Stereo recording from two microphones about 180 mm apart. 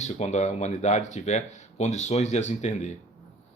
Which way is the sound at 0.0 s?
40° left (ahead or behind).